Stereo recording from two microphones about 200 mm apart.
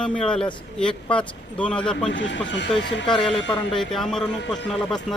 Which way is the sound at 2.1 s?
65° left (ahead or behind).